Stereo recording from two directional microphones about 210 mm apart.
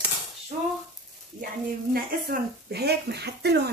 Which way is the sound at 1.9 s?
45° right (ahead or behind).